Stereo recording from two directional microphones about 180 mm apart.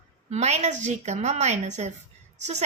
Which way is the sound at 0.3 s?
40° right (ahead or behind).